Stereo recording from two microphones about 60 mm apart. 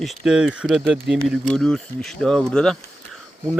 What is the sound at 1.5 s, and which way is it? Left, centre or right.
Speech, centre.